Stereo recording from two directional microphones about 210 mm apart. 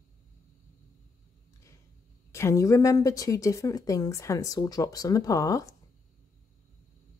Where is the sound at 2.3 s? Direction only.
15° left (ahead or behind).